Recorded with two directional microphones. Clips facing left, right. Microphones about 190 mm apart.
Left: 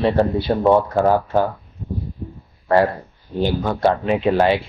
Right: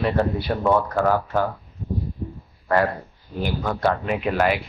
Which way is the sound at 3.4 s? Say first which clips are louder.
Left 5 dB; 25° left (ahead or behind).